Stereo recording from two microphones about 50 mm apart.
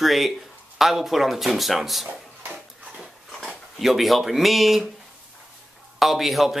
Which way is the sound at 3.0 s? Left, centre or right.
Centre.